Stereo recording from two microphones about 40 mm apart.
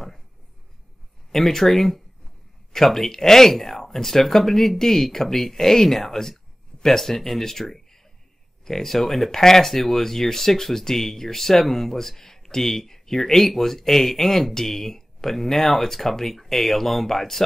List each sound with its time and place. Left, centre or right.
1.3 s speech: centre